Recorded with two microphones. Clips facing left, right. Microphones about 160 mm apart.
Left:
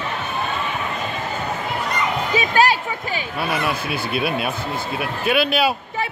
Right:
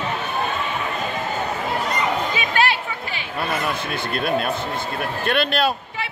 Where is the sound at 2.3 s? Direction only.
40° left (ahead or behind).